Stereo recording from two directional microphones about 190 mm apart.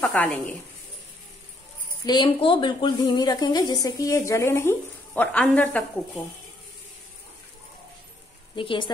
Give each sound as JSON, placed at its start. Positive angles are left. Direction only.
{"t": 0.0, "sound": "speech", "side_deg": 10}
{"t": 2.0, "sound": "a woman's voice", "side_deg": 25}
{"t": 8.5, "sound": "a woman's voice", "side_deg": 25}